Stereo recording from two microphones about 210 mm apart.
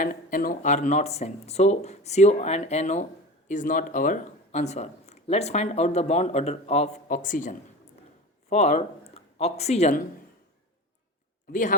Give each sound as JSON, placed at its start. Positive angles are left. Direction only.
{"t": 0.0, "sound": "speech", "side_deg": 40}